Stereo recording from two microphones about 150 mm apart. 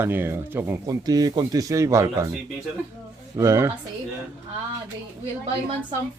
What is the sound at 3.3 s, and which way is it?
Speech, 20° right (ahead or behind).